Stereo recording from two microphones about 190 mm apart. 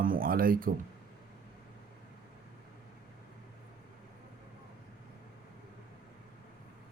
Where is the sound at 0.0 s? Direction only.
50° right (ahead or behind).